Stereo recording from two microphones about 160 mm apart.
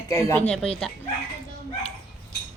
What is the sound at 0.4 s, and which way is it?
Speech, 5° left (ahead or behind).